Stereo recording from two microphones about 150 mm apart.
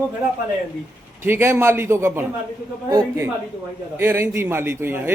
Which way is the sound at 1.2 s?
15° right (ahead or behind).